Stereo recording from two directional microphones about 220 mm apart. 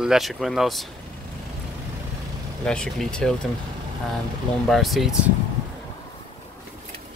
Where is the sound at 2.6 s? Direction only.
5° left (ahead or behind).